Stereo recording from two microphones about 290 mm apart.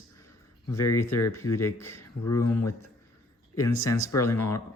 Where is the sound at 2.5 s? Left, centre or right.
Left.